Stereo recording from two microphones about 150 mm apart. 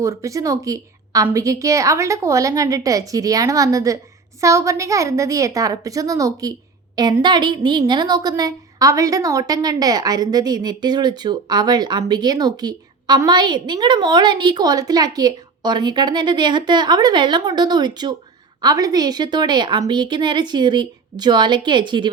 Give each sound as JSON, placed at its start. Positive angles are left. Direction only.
{"t": 0.0, "sound": "a woman's voice", "side_deg": -20}